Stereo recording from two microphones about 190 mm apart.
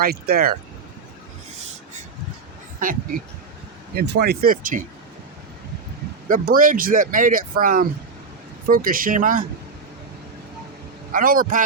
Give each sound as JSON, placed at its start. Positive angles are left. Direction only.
{"t": 0.0, "sound": "speech", "side_deg": -55}
{"t": 2.8, "sound": "speech", "side_deg": -45}
{"t": 3.9, "sound": "speech", "side_deg": -60}
{"t": 6.2, "sound": "speech", "side_deg": -45}
{"t": 11.1, "sound": "speech", "side_deg": -45}